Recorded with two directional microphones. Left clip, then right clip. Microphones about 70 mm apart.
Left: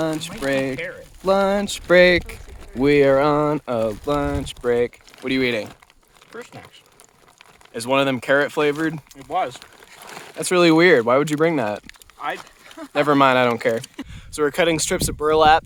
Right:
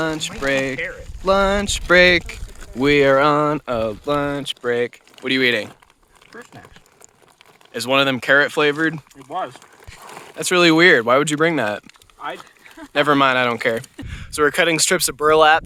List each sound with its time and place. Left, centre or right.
0.0 s speech: left
2.8 s speech: left
4.2 s speech: centre
7.7 s speech: centre
9.3 s speech: left
10.2 s vehicle: centre
10.4 s speech: left
12.9 s speech: left
14.1 s speech: centre